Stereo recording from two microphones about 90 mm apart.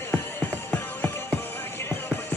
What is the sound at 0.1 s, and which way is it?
Music, 25° left (ahead or behind).